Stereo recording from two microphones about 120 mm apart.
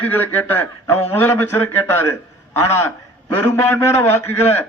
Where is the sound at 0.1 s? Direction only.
15° left (ahead or behind).